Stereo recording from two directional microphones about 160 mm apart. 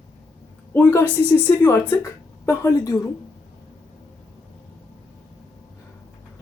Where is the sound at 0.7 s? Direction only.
10° left (ahead or behind).